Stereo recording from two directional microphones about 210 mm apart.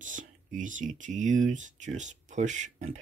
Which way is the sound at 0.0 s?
40° right (ahead or behind).